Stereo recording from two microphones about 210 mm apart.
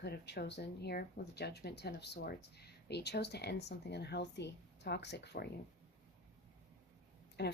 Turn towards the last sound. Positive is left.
turn(degrees=50)  # may be behind; listen again after turning